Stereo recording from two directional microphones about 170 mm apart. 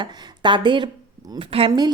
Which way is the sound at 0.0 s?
25° right (ahead or behind).